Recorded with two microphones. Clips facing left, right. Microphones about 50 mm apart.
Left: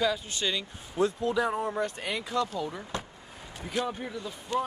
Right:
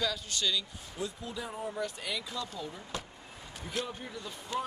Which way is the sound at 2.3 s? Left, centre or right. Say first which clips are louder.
Left 10 dB; left.